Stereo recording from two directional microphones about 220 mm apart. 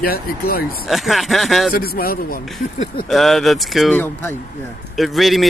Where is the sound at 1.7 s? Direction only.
40° left (ahead or behind).